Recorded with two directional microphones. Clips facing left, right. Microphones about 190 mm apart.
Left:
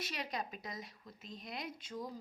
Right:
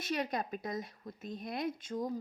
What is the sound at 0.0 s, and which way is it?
A woman's voice, 50° right (ahead or behind).